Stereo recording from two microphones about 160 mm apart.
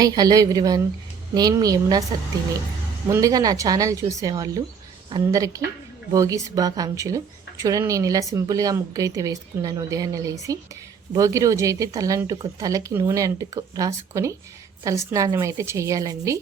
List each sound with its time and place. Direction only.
0.0 s speech: 25° right (ahead or behind)
3.1 s speech: 20° right (ahead or behind)